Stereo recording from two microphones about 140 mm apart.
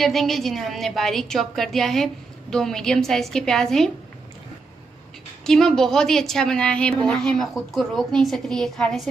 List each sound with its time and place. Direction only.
0.0 s a woman's voice: centre (ahead or behind)
5.4 s a woman's voice: 5° left (ahead or behind)